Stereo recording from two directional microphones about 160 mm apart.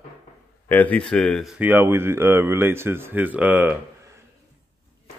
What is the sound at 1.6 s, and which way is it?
Speech, 10° right (ahead or behind).